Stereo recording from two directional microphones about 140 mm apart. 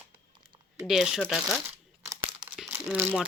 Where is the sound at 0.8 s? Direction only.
5° right (ahead or behind).